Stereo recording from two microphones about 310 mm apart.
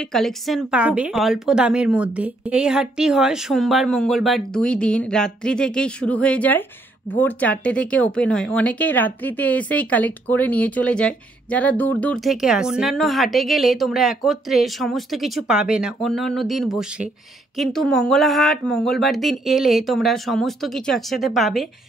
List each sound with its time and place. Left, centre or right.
0.1 s speech: centre